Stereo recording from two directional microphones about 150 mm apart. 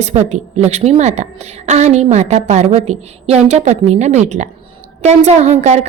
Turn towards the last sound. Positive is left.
turn(degrees=-50)  # may be behind; listen again after turning